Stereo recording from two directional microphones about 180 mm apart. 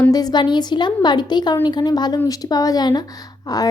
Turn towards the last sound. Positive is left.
turn(degrees=20)  # may be behind; listen again after turning